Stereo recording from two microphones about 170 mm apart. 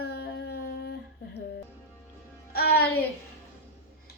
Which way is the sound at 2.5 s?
65° left (ahead or behind).